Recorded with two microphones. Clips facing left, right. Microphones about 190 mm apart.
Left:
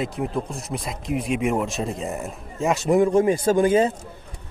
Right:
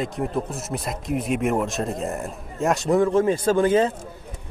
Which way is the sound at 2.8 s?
15° left (ahead or behind).